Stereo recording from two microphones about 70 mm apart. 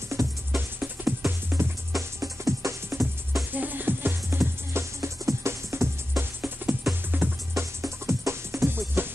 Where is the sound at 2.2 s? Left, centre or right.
Right.